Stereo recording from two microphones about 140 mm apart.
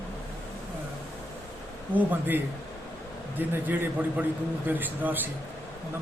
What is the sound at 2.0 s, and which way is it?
A man's voice, 15° right (ahead or behind).